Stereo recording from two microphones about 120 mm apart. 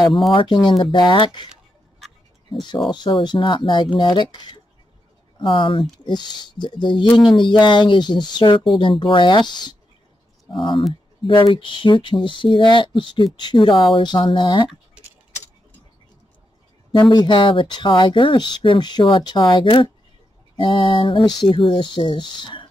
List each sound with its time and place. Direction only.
0.3 s speech: 45° left (ahead or behind)
2.9 s speech: 40° left (ahead or behind)
16.9 s speech: 35° left (ahead or behind)